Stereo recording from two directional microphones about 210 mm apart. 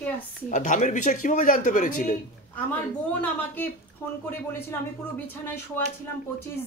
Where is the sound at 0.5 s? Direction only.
35° left (ahead or behind).